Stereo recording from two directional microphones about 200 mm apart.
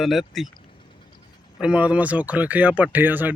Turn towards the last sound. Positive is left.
turn(degrees=-10)  # may be behind; listen again after turning